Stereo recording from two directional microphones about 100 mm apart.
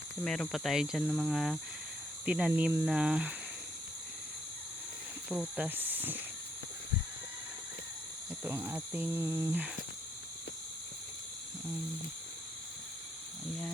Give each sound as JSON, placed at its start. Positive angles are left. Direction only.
{"t": 0.2, "sound": "speech", "side_deg": 5}
{"t": 5.3, "sound": "speech", "side_deg": -5}
{"t": 5.6, "sound": "speech", "side_deg": -20}
{"t": 8.4, "sound": "speech", "side_deg": -20}